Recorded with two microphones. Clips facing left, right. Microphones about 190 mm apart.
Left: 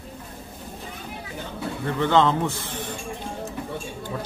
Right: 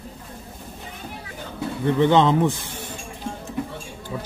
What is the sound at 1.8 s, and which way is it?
A man's voice, 20° right (ahead or behind).